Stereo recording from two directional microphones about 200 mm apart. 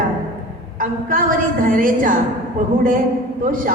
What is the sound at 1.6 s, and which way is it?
Speech, 45° right (ahead or behind).